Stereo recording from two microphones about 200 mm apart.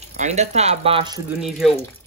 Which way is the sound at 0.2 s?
35° right (ahead or behind).